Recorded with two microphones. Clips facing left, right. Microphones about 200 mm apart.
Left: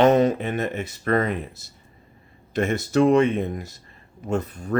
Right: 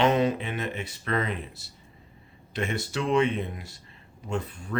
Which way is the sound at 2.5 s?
45° left (ahead or behind).